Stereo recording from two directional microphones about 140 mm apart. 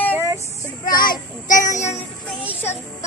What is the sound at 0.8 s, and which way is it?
Speech, 90° left.